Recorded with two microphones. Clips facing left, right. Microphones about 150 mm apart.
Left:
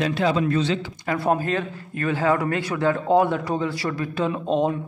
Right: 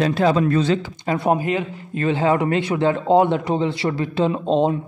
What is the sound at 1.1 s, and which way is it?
Speech, 20° right (ahead or behind).